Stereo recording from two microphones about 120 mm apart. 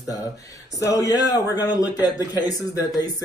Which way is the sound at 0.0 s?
30° left (ahead or behind).